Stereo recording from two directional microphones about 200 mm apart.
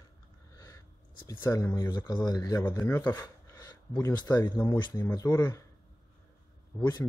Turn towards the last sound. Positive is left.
turn(degrees=20)  # may be behind; listen again after turning